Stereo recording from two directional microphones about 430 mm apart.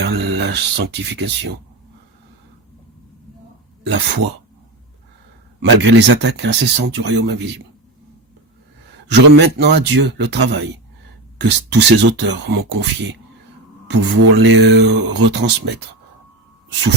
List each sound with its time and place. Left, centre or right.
0.0 s speech: right
3.8 s speech: right
5.8 s speech: right
9.0 s speech: right